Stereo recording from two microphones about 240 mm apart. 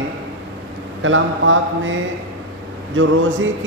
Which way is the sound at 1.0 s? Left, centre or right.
Right.